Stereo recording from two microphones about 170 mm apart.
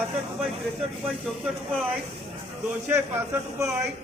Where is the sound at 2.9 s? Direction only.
15° right (ahead or behind).